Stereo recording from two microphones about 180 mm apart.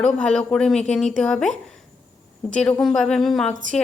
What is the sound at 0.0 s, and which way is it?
A woman's voice, 5° left (ahead or behind).